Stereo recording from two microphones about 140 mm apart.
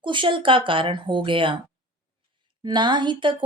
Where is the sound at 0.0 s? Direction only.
35° right (ahead or behind).